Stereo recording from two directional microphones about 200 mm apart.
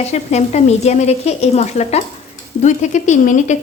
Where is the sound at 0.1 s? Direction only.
35° left (ahead or behind).